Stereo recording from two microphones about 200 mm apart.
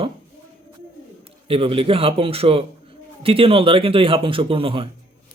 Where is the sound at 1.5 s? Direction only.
25° right (ahead or behind).